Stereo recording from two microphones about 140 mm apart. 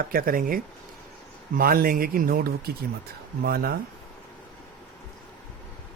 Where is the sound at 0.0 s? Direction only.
90° right.